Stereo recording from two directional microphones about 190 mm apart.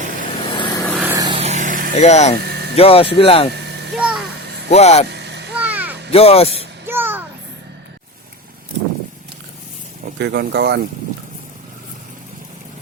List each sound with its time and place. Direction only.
0.4 s vehicle: 25° left (ahead or behind)
1.0 s vehicle: 15° right (ahead or behind)
1.4 s vehicle: 35° right (ahead or behind)
2.0 s speech: 35° left (ahead or behind)
2.5 s vehicle: 60° right (ahead or behind)
2.7 s speech: 30° left (ahead or behind)
3.9 s a sound: 5° right (ahead or behind)
4.7 s speech: 35° left (ahead or behind)
5.0 s vehicle: 60° right (ahead or behind)
5.5 s a sound: 10° right (ahead or behind)
6.1 s speech: 30° left (ahead or behind)
6.8 s a sound: 10° right (ahead or behind)
10.2 s speech: 60° right (ahead or behind)